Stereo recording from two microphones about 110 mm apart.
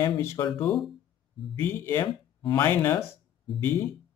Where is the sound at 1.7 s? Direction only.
20° left (ahead or behind).